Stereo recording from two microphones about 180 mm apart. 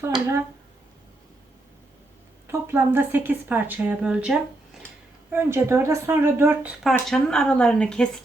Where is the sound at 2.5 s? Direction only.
10° right (ahead or behind).